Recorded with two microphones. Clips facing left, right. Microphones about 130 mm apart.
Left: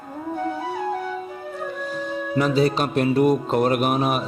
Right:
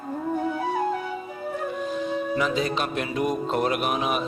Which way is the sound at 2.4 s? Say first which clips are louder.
Left 8 dB; 40° left (ahead or behind).